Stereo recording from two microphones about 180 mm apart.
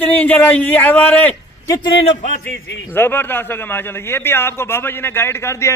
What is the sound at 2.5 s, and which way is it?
Speech, 65° left (ahead or behind).